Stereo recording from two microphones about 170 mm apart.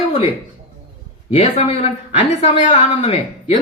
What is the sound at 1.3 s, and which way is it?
Speech, 40° left (ahead or behind).